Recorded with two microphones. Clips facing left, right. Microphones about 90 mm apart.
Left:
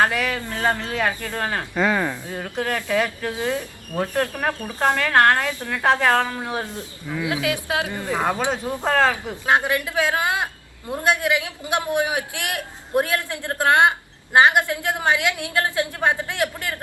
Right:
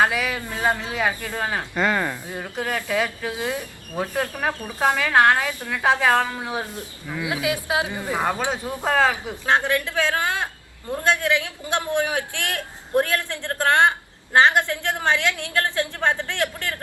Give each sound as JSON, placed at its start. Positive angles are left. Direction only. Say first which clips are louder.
{"t": 0.0, "sound": "speech", "louder": "left 1 dB", "side_deg": -5}
{"t": 1.7, "sound": "a man's voice", "louder": "left 2 dB", "side_deg": 5}
{"t": 2.2, "sound": "speech", "louder": "left 2 dB", "side_deg": -5}
{"t": 7.1, "sound": "speech", "louder": "left 1 dB", "side_deg": -15}
{"t": 8.4, "sound": "a man's voice", "louder": "left 2 dB", "side_deg": 15}
{"t": 8.8, "sound": "speech", "louder": "even", "side_deg": -5}
{"t": 9.5, "sound": "a man's voice", "louder": "left 1 dB", "side_deg": 15}